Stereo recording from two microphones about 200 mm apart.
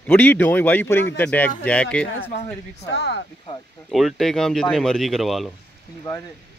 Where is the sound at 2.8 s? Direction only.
60° left (ahead or behind).